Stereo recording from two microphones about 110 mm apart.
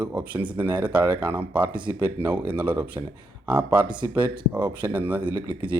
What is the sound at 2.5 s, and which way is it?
Speech, 15° right (ahead or behind).